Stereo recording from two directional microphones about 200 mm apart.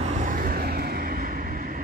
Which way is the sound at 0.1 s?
40° right (ahead or behind).